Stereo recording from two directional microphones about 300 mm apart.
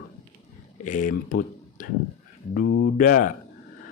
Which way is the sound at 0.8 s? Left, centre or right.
Left.